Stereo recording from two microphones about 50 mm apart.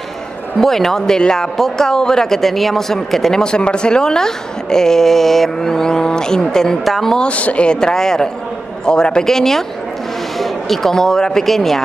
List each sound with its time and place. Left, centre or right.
0.6 s speech: centre
7.2 s speech: left; by 11.8 s centre